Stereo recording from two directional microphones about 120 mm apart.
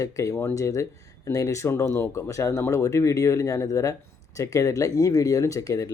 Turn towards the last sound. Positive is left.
turn(degrees=30)  # may be behind; listen again after turning